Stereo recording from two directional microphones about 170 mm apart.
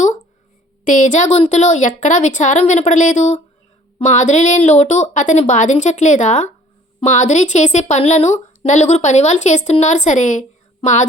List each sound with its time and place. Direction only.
0.9 s a woman's voice: 50° left (ahead or behind)